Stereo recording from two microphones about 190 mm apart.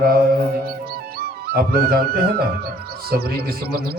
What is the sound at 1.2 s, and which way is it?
Music, 55° right (ahead or behind).